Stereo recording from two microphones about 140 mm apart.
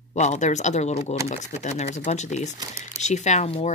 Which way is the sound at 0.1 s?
55° left (ahead or behind).